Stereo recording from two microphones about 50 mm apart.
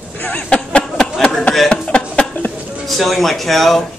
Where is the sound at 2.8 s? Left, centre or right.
Centre.